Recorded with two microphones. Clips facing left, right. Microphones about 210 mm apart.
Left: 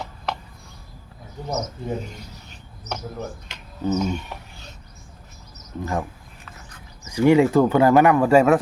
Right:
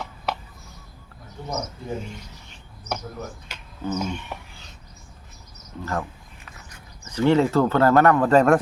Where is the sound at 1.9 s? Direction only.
40° left (ahead or behind).